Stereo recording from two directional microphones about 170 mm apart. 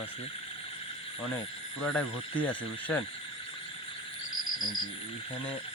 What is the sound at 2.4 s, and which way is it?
Speech, 10° left (ahead or behind).